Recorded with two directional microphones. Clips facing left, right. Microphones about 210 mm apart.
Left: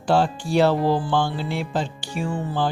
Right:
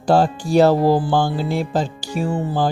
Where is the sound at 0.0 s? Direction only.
40° right (ahead or behind).